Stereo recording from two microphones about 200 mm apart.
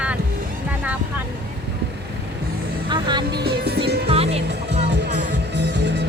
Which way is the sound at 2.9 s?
20° right (ahead or behind).